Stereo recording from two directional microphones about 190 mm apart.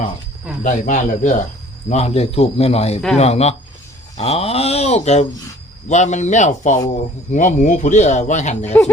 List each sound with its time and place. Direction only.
0.6 s speech: 40° left (ahead or behind)
8.6 s speech: 10° left (ahead or behind)